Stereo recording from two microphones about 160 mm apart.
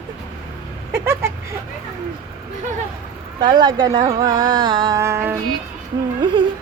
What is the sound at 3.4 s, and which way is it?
Speech, 25° right (ahead or behind).